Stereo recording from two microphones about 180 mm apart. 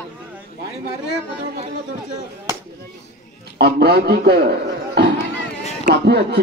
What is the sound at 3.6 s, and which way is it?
A man's voice, 60° right (ahead or behind).